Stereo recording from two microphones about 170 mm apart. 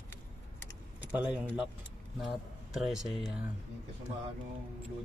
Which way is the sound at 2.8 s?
Centre (ahead or behind).